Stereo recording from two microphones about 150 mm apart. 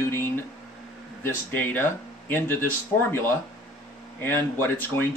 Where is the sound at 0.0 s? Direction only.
15° left (ahead or behind).